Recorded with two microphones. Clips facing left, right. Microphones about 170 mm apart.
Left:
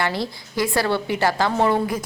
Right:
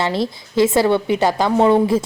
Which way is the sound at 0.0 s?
20° right (ahead or behind).